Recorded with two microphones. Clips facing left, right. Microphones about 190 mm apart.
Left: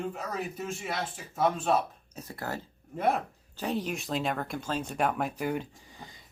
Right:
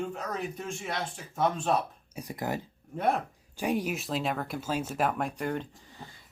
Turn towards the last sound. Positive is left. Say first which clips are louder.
# right 1 dB
turn(degrees=15)  # may be behind; listen again after turning